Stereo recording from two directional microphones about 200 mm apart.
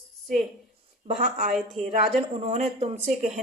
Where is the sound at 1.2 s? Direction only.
45° right (ahead or behind).